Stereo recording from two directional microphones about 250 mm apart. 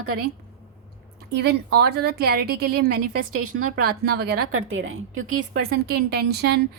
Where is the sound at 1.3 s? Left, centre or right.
Right.